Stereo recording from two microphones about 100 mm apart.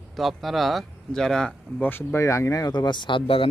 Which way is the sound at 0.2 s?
Centre (ahead or behind).